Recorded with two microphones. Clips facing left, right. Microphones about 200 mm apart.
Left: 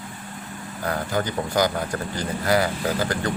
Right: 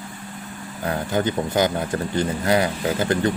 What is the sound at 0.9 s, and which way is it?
Speech, 20° right (ahead or behind).